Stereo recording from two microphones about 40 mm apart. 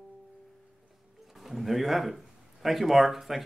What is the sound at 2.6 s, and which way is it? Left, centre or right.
Speech, centre.